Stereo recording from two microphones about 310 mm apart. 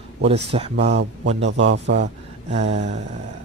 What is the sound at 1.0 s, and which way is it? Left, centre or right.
Speech, right.